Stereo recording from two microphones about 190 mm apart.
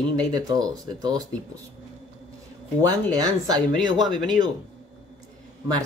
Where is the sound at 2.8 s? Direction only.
20° right (ahead or behind).